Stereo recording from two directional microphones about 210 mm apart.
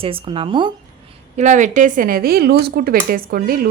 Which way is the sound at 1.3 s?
35° right (ahead or behind).